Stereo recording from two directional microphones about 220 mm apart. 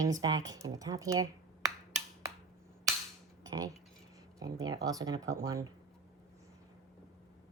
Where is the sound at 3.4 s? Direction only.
15° right (ahead or behind).